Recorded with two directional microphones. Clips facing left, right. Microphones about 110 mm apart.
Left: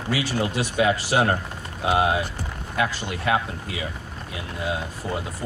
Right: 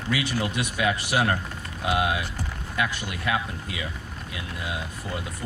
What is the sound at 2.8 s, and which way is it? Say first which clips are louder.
Speech: left 3 dB; 35° left (ahead or behind).